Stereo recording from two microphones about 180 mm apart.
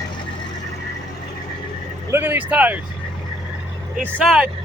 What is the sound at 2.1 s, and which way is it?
Speech, 10° right (ahead or behind).